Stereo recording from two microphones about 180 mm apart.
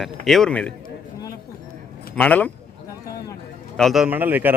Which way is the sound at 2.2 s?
10° left (ahead or behind).